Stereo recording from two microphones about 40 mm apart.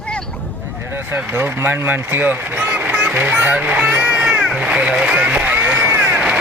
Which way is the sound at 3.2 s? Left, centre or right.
Right.